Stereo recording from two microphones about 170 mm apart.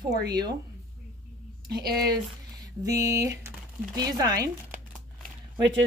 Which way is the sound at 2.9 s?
20° right (ahead or behind).